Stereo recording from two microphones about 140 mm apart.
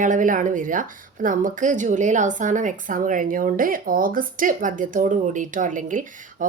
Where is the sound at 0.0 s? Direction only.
65° right (ahead or behind).